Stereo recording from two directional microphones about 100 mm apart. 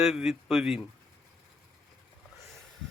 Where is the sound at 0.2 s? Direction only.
Centre (ahead or behind).